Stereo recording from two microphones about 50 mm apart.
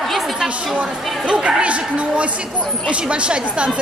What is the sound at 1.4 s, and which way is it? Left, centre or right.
A woman's voice, right.